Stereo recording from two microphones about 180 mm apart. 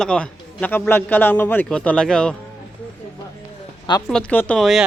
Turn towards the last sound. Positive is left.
turn(degrees=0)  # may be behind; listen again after turning